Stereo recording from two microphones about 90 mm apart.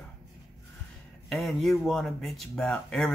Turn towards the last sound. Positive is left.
turn(degrees=5)  # may be behind; listen again after turning